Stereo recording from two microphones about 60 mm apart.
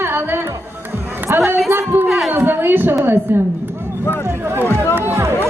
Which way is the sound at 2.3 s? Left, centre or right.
Right.